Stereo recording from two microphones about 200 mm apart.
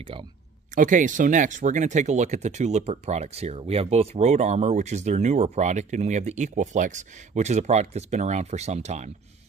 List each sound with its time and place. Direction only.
0.0 s speech: 25° right (ahead or behind)
0.7 s speech: 40° right (ahead or behind)